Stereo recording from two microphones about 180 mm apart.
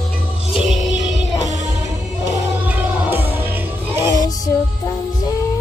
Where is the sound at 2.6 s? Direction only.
10° right (ahead or behind).